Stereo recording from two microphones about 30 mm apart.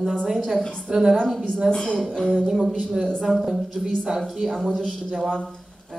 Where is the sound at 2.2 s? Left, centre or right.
Left.